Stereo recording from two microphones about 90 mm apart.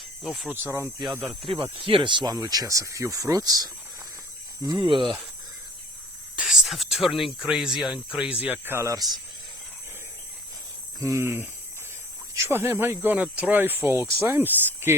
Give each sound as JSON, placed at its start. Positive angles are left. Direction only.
{"t": 0.5, "sound": "speech", "side_deg": -25}
{"t": 1.3, "sound": "speech", "side_deg": 0}
{"t": 1.7, "sound": "speech", "side_deg": -85}
{"t": 2.3, "sound": "speech", "side_deg": -45}
{"t": 4.8, "sound": "speech", "side_deg": -75}
{"t": 6.3, "sound": "a sound", "side_deg": -10}
{"t": 7.4, "sound": "speech", "side_deg": -5}
{"t": 11.0, "sound": "speech", "side_deg": -30}